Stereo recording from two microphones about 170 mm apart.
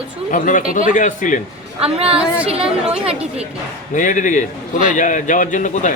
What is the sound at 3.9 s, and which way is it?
A man's voice, 45° left (ahead or behind).